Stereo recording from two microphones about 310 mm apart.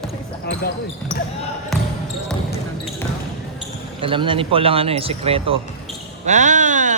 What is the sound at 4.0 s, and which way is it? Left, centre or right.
Speech, centre.